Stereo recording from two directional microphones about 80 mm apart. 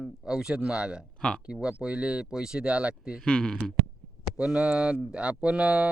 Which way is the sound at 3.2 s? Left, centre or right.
Centre.